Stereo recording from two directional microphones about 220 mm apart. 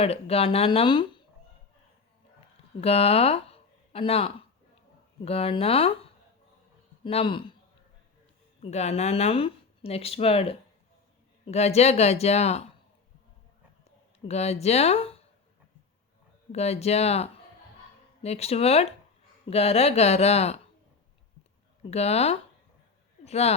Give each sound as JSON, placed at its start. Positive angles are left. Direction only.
{"t": 0.0, "sound": "speech", "side_deg": 25}
{"t": 2.8, "sound": "speech", "side_deg": 25}
{"t": 8.6, "sound": "speech", "side_deg": 30}
{"t": 14.3, "sound": "speech", "side_deg": 30}
{"t": 16.5, "sound": "speech", "side_deg": 30}
{"t": 21.8, "sound": "speech", "side_deg": 30}